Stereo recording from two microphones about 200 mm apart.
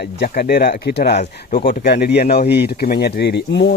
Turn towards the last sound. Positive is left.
turn(degrees=60)  # may be behind; listen again after turning